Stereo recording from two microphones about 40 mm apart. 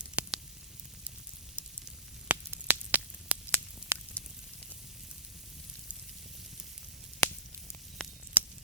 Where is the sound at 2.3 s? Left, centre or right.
Right.